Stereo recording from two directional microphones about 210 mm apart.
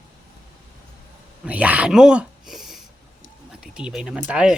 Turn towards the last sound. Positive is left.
turn(degrees=-5)  # may be behind; listen again after turning